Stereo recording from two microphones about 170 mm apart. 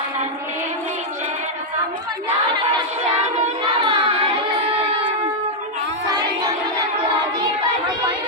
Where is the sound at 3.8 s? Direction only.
30° right (ahead or behind).